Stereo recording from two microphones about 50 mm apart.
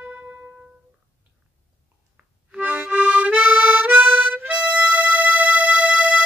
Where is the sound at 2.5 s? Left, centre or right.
Right.